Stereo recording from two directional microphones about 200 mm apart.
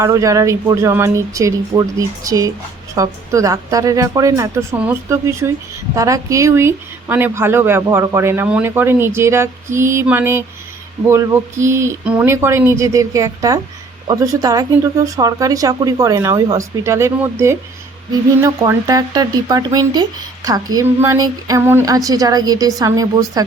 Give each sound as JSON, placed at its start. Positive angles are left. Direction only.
{"t": 0.0, "sound": "speech", "side_deg": -15}